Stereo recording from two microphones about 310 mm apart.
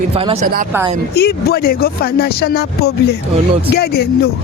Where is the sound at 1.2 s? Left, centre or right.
Left.